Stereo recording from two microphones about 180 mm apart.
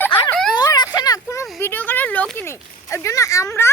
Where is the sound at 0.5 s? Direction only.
20° left (ahead or behind).